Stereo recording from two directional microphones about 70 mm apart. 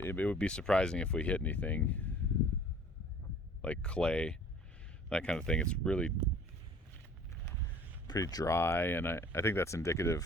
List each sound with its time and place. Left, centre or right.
0.0 s speech: left
0.3 s speech: centre
3.6 s speech: centre
8.0 s speech: left
8.4 s speech: left